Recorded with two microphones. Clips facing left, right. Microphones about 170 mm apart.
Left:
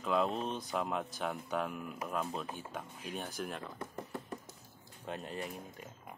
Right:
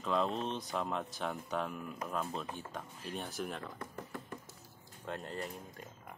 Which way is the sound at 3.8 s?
20° left (ahead or behind).